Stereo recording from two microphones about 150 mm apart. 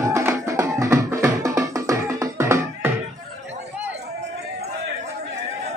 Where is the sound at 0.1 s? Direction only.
20° right (ahead or behind).